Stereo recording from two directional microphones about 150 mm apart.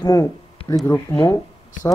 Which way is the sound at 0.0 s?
25° left (ahead or behind).